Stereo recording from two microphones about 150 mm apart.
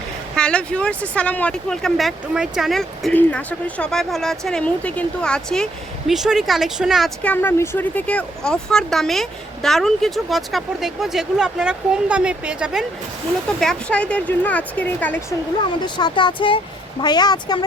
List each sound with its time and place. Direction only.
0.3 s speech: 5° left (ahead or behind)
7.3 s speech: 15° left (ahead or behind); by 12.8 s 5° right (ahead or behind)
13.6 s speech: 5° left (ahead or behind)
16.0 s a woman's voice: 30° left (ahead or behind)